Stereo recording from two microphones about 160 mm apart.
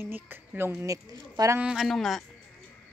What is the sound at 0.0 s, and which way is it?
Speech, 15° right (ahead or behind).